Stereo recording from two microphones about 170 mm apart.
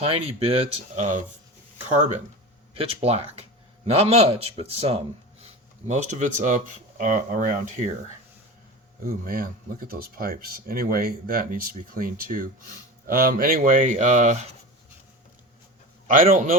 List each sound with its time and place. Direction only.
0.0 s a man's voice: 35° right (ahead or behind)
2.7 s a man's voice: 35° right (ahead or behind); by 7.9 s 50° right (ahead or behind)
9.0 s speech: 55° right (ahead or behind)
16.0 s speech: 50° right (ahead or behind)